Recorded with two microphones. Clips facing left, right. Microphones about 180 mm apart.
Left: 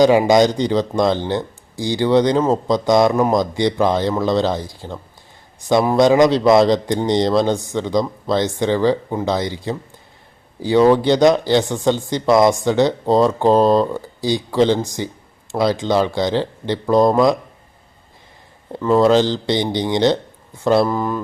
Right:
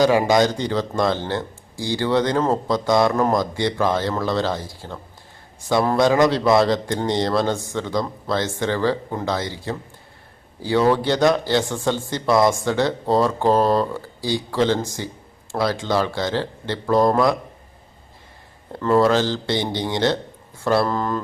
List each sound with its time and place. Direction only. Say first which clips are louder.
0.0 s speech: left 4 dB; 20° left (ahead or behind)
18.7 s speech: left 3 dB; 15° left (ahead or behind)